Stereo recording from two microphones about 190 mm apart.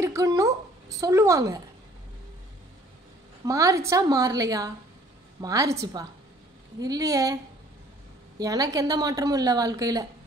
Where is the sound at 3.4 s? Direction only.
15° right (ahead or behind).